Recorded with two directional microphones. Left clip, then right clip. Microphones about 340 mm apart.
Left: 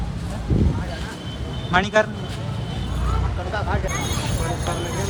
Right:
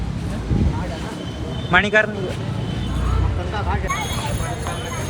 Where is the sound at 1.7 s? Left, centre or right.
Centre.